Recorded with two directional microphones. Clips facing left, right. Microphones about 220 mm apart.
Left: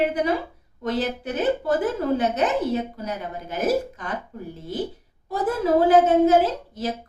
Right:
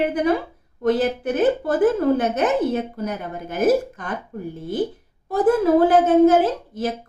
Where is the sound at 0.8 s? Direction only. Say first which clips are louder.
Right 6 dB; 50° right (ahead or behind).